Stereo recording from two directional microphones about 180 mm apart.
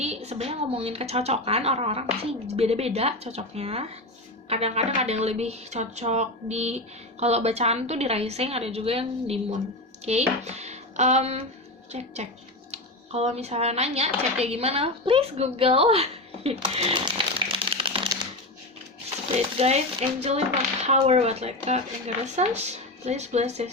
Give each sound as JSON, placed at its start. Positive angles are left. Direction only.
{"t": 0.0, "sound": "a woman's voice", "side_deg": -35}
{"t": 19.4, "sound": "a woman's voice", "side_deg": -35}